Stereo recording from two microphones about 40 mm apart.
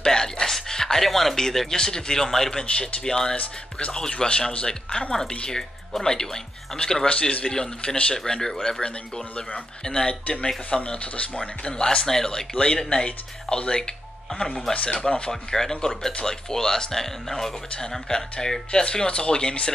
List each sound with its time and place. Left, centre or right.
0.0 s a sound: centre
1.0 s speech: centre
2.6 s speech: left
5.5 s speech: centre
7.1 s speech: left
7.4 s speech: centre
9.8 s speech: centre
10.2 s speech: left; by 12.4 s centre
12.9 s speech: left
15.5 s speech: centre